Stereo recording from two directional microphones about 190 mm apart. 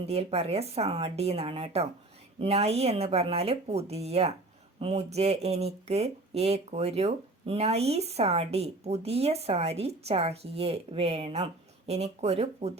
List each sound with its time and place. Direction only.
0.0 s speech: 30° right (ahead or behind)